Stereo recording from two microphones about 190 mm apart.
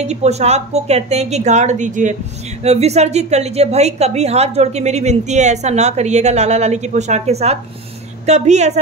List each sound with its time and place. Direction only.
0.0 s a woman's voice: 35° right (ahead or behind)